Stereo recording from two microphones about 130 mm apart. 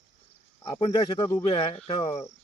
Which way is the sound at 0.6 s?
40° left (ahead or behind).